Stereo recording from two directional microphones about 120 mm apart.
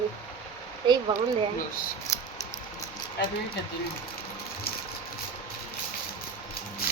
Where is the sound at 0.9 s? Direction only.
40° right (ahead or behind).